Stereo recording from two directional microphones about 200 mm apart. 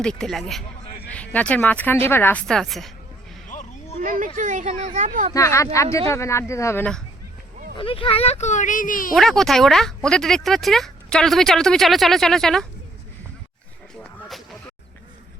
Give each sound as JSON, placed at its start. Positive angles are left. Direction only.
{"t": 0.0, "sound": "speech", "side_deg": 5}
{"t": 3.5, "sound": "a sound", "side_deg": 35}
{"t": 4.4, "sound": "a woman's voice", "side_deg": -40}
{"t": 5.3, "sound": "speech", "side_deg": 15}
{"t": 7.8, "sound": "speech", "side_deg": 25}
{"t": 9.1, "sound": "speech", "side_deg": 0}
{"t": 14.0, "sound": "music", "side_deg": 0}